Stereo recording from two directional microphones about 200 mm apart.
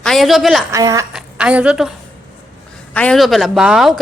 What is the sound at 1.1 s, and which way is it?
A woman's voice, 5° right (ahead or behind).